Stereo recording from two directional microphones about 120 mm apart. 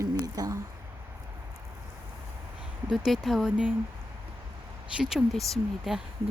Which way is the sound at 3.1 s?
Centre (ahead or behind).